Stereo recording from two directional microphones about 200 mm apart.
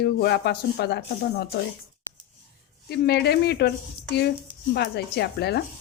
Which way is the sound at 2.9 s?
55° left (ahead or behind).